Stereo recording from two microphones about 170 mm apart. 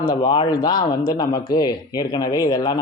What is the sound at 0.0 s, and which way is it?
Speech, 25° left (ahead or behind).